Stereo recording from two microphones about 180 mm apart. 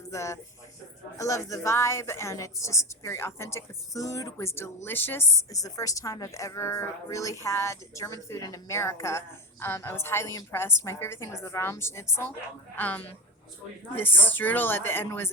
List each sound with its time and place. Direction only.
0.1 s a woman's voice: 15° left (ahead or behind)